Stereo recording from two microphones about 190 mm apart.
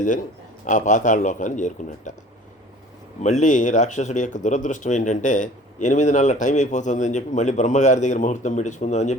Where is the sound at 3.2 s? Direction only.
40° left (ahead or behind).